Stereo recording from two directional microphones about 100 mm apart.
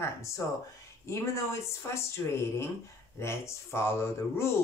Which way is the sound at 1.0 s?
30° left (ahead or behind).